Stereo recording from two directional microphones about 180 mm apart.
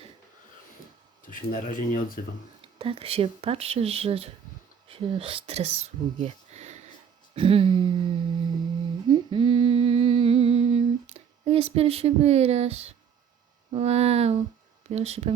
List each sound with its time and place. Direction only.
1.3 s speech: 50° left (ahead or behind)
2.7 s speech: 30° right (ahead or behind)
7.3 s a sound: 30° right (ahead or behind)
9.0 s humming: 25° right (ahead or behind)
13.7 s speech: 35° right (ahead or behind)